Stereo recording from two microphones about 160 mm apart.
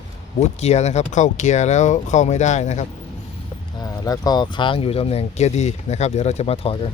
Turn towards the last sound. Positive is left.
turn(degrees=40)  # may be behind; listen again after turning